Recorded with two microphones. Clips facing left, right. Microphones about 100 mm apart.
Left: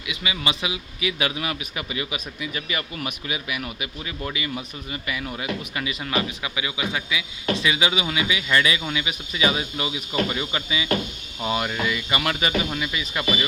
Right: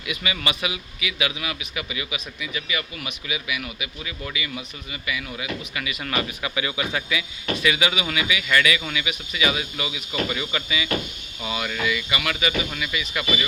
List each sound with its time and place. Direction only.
0.1 s speech: 20° left (ahead or behind)
1.0 s a man's voice: 40° left (ahead or behind)
6.0 s a man's voice: 15° left (ahead or behind)